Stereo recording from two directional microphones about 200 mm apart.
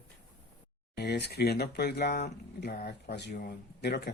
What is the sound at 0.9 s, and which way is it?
Speech, 55° left (ahead or behind).